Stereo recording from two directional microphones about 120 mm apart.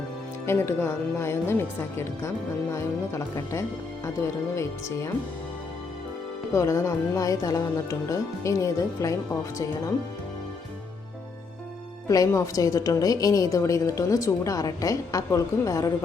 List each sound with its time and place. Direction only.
0.4 s a woman's voice: 20° left (ahead or behind)
6.5 s a woman's voice: 25° left (ahead or behind)
12.0 s a woman's voice: 30° left (ahead or behind)